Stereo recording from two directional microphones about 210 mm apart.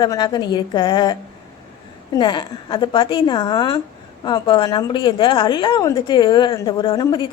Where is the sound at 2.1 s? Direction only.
20° left (ahead or behind).